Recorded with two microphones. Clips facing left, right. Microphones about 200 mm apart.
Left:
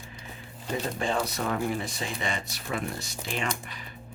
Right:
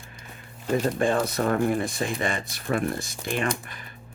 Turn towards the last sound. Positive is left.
turn(degrees=-50)  # may be behind; listen again after turning